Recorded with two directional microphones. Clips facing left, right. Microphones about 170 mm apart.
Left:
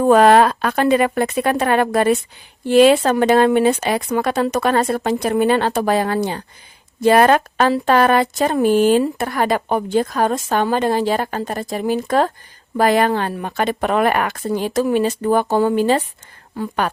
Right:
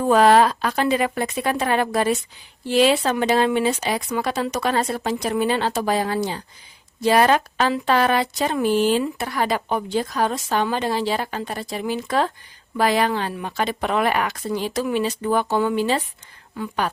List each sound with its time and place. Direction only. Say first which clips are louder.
0.0 s speech: left 4 dB; 55° left (ahead or behind)
16.6 s speech: left 4 dB; 35° left (ahead or behind)